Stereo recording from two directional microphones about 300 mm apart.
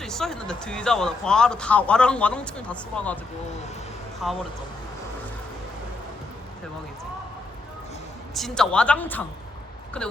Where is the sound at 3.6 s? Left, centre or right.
Left.